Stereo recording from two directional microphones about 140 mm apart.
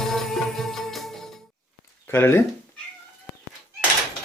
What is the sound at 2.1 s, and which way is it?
Speech, 15° left (ahead or behind).